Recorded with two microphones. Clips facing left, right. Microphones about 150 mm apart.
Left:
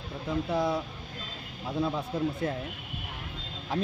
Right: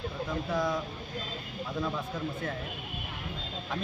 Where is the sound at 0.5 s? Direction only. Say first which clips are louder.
Left 2 dB; 25° left (ahead or behind).